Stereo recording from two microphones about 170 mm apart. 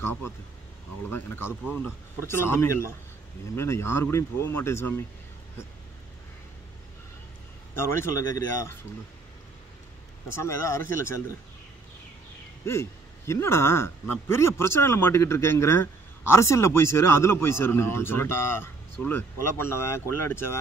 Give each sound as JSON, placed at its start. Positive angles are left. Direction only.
{"t": 1.1, "sound": "speech", "side_deg": 15}
{"t": 7.7, "sound": "speech", "side_deg": 15}
{"t": 10.3, "sound": "speech", "side_deg": 15}
{"t": 12.6, "sound": "speech", "side_deg": 15}